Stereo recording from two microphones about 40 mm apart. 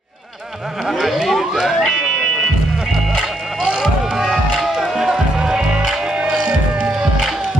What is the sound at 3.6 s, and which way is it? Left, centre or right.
Music, centre.